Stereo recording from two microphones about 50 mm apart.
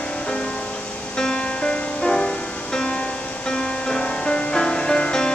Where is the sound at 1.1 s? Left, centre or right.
Centre.